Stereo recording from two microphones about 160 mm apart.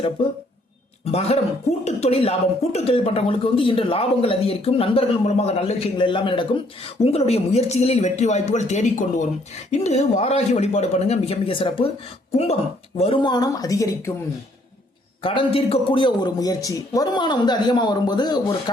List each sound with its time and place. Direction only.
1.0 s a man's voice: 40° left (ahead or behind)
13.0 s a man's voice: 35° left (ahead or behind)
15.2 s a man's voice: 35° left (ahead or behind)